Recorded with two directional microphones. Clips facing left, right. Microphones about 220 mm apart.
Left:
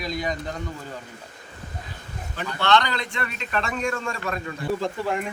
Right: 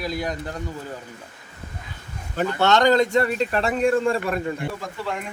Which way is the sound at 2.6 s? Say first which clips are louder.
Right 5 dB; 45° right (ahead or behind).